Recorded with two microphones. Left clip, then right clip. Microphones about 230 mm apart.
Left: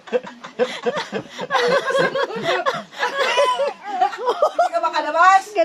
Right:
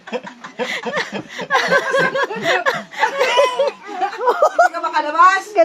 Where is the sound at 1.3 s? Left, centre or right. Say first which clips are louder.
Right 3 dB; centre.